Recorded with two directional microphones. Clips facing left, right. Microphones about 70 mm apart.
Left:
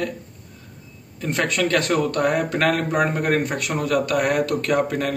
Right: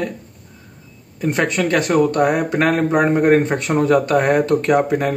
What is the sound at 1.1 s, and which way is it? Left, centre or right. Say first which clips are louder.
A man's voice: right 4 dB; right.